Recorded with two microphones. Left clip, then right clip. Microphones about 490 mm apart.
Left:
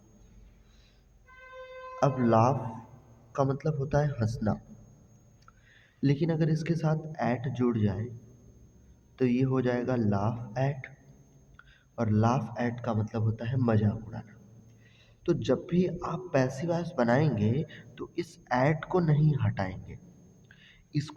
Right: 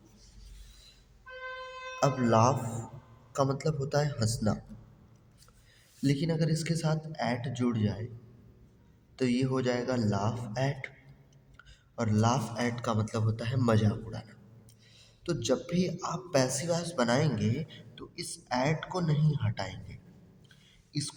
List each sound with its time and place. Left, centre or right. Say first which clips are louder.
2.0 s a man's voice: left 1 dB; left
6.0 s a man's voice: left 2 dB; left
9.1 s a man's voice: left 2 dB; left
20.9 s speech: left 1 dB; left